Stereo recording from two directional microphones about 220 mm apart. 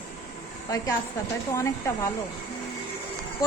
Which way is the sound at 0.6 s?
15° left (ahead or behind).